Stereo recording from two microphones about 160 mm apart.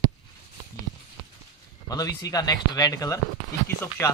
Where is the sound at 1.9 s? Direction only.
20° left (ahead or behind).